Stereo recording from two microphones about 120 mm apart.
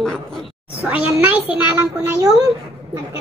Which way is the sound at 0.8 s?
10° right (ahead or behind).